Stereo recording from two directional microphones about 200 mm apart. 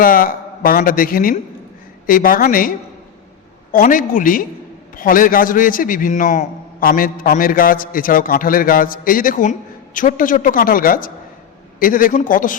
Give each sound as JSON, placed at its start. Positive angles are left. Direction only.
{"t": 0.0, "sound": "a man's voice", "side_deg": 45}